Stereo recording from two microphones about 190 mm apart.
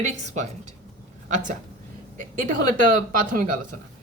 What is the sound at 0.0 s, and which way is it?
Speech, 40° right (ahead or behind).